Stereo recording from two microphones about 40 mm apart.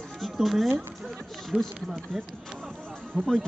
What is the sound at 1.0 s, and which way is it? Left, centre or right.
Speech, centre.